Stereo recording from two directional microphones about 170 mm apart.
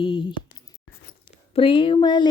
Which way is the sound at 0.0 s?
30° left (ahead or behind).